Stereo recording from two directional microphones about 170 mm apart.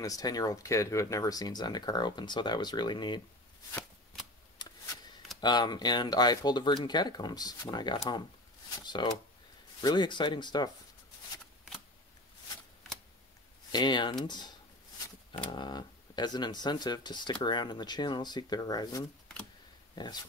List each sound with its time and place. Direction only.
0.0 s speech: 20° left (ahead or behind)
4.6 s a sound: 25° left (ahead or behind)
5.4 s speech: 25° left (ahead or behind)
13.7 s speech: 25° left (ahead or behind)
15.5 s speech: 25° left (ahead or behind)